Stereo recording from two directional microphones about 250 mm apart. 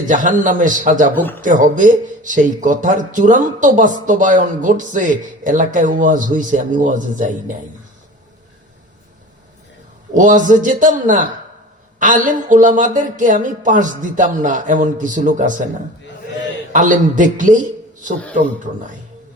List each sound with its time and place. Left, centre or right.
0.0 s speech: right
10.2 s speech: right
16.7 s a man's voice: right